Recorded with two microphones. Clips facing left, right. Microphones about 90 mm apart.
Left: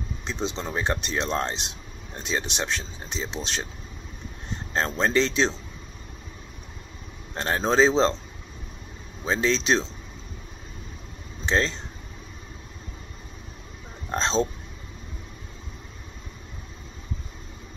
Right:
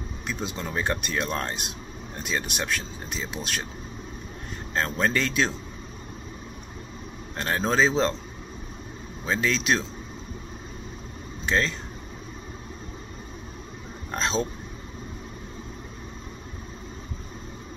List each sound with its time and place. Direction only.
0.3 s speech: 25° left (ahead or behind)
7.3 s speech: 30° left (ahead or behind)
9.2 s speech: 30° left (ahead or behind)
11.4 s speech: 30° left (ahead or behind)
14.1 s speech: 30° left (ahead or behind)